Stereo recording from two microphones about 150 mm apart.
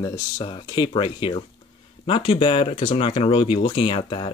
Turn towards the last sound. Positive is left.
turn(degrees=35)  # may be behind; listen again after turning